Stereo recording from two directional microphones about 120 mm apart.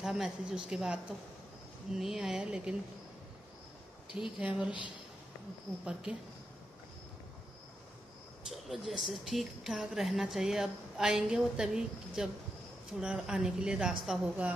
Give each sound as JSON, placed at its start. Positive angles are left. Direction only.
{"t": 0.0, "sound": "speech", "side_deg": -5}
{"t": 4.1, "sound": "a woman's voice", "side_deg": -5}
{"t": 8.5, "sound": "a woman's voice", "side_deg": 0}